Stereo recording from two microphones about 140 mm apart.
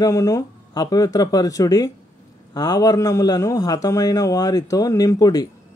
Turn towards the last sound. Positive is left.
turn(degrees=25)  # may be behind; listen again after turning